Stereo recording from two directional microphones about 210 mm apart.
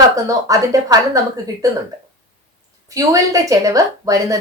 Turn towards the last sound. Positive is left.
turn(degrees=-15)  # may be behind; listen again after turning